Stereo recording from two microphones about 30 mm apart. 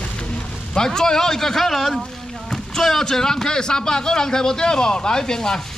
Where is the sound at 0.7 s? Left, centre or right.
Left.